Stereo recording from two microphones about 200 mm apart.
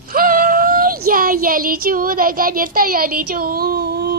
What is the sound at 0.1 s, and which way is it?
Child singing, 45° right (ahead or behind).